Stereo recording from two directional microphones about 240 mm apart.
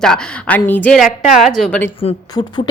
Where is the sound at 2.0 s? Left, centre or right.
Left.